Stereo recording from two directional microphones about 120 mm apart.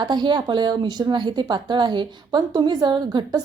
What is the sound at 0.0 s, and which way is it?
A woman's voice, 40° right (ahead or behind).